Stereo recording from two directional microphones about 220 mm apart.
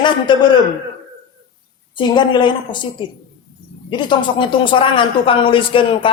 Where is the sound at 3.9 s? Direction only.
20° left (ahead or behind).